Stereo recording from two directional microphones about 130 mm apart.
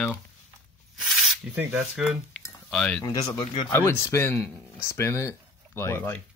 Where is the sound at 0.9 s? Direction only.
5° right (ahead or behind).